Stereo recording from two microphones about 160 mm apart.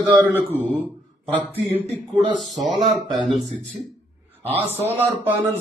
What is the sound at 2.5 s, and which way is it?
Speech, 45° right (ahead or behind).